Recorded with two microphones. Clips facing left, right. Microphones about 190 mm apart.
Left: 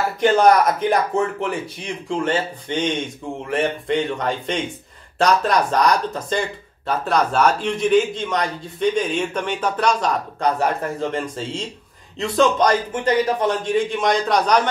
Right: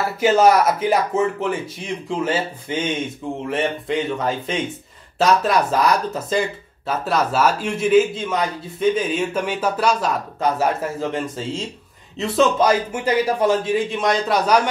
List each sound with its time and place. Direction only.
0.2 s a man's voice: 5° right (ahead or behind)